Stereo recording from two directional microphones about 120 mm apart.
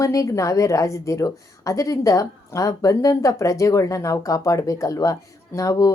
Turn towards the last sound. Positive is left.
turn(degrees=30)  # may be behind; listen again after turning